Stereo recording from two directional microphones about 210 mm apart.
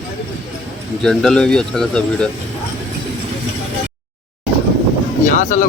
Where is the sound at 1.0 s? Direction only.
5° left (ahead or behind).